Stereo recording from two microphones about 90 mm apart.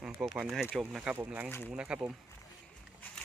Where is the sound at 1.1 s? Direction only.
20° right (ahead or behind).